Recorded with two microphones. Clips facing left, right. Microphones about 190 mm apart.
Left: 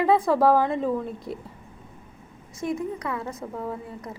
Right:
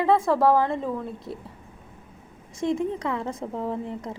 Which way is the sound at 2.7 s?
25° right (ahead or behind).